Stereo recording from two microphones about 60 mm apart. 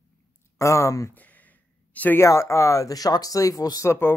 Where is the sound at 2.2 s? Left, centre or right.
Left.